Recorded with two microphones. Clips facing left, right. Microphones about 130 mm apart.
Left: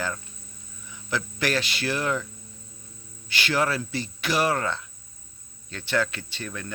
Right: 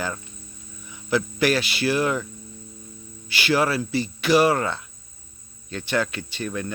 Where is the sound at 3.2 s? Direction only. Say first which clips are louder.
Right 4 dB; 5° right (ahead or behind).